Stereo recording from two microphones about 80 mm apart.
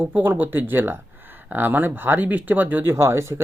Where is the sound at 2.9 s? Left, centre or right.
Right.